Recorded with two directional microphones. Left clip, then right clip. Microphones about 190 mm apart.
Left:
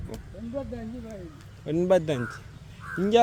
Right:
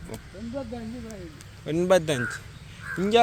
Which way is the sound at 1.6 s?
15° left (ahead or behind).